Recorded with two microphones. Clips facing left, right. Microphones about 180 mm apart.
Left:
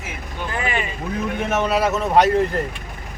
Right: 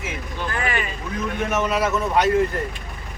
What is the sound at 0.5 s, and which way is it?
Speech, 20° left (ahead or behind).